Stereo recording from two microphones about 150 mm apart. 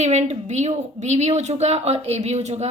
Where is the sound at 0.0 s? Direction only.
50° right (ahead or behind).